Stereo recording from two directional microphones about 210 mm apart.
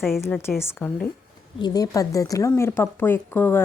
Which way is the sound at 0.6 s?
10° left (ahead or behind).